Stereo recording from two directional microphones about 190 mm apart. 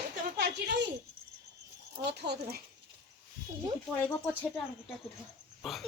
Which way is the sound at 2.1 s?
60° right (ahead or behind).